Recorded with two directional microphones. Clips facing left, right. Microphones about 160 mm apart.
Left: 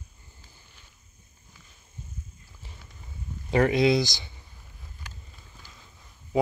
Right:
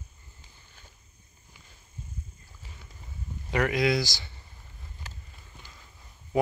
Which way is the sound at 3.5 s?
30° left (ahead or behind).